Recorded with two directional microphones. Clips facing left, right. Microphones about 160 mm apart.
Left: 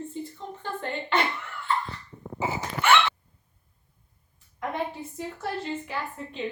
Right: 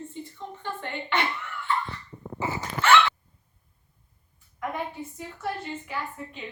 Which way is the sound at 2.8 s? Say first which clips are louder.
Right 2 dB; 20° left (ahead or behind).